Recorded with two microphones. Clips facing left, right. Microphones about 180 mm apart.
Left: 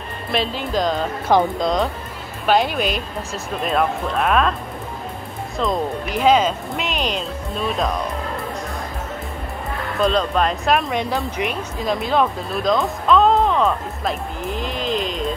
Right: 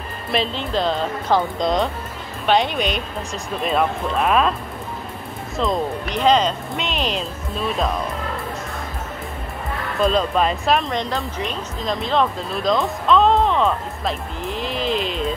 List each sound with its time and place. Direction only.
0.3 s speech: 5° left (ahead or behind)
1.6 s speech: centre (ahead or behind)
5.6 s speech: centre (ahead or behind)
9.9 s speech: centre (ahead or behind)